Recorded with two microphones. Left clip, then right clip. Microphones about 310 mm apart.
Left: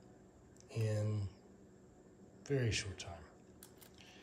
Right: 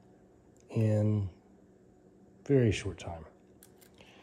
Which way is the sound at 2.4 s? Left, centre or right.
Right.